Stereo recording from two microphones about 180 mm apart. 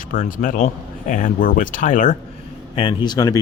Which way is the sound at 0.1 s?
50° left (ahead or behind).